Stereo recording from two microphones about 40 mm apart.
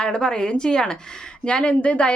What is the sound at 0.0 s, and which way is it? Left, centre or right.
Speech, left.